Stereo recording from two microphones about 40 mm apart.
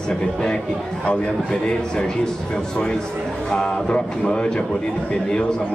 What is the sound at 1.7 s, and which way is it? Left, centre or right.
A man's voice, centre.